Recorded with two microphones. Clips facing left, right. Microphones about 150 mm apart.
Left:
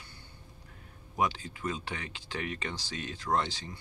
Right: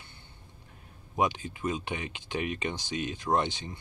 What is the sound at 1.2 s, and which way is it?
Speech, 20° right (ahead or behind).